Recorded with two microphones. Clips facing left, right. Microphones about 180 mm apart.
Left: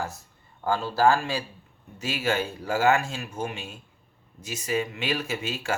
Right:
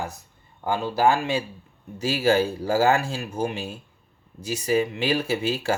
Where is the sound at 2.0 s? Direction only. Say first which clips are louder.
Right 6 dB; 30° right (ahead or behind).